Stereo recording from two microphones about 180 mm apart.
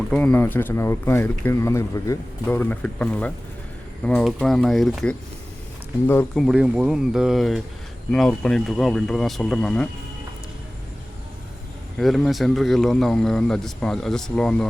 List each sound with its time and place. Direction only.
0.1 s speech: 5° left (ahead or behind)
6.1 s speech: 10° left (ahead or behind)
6.4 s speech: 5° right (ahead or behind)
11.9 s speech: centre (ahead or behind)